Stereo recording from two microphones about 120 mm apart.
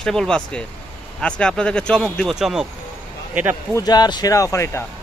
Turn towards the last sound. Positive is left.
turn(degrees=25)  # may be behind; listen again after turning